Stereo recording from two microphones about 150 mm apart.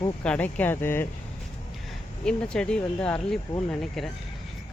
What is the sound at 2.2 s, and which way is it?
Speech, 5° left (ahead or behind).